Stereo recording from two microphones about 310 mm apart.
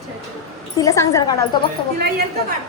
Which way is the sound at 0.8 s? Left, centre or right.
Centre.